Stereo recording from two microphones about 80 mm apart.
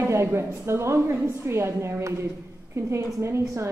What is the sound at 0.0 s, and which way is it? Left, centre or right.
A woman's voice, right.